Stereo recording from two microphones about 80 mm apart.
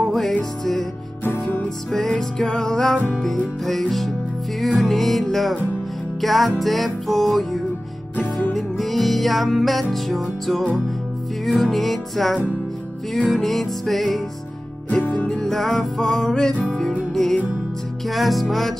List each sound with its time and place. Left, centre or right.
0.1 s music: centre
1.9 s music: centre
8.5 s music: centre
14.9 s music: centre
15.2 s music: centre
17.1 s music: centre